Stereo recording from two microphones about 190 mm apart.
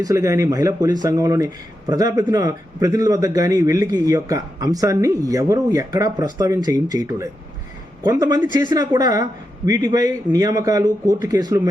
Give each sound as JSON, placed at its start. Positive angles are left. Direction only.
{"t": 0.0, "sound": "a man's voice", "side_deg": -15}